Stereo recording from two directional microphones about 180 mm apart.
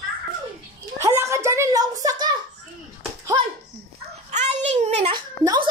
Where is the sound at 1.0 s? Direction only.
15° right (ahead or behind).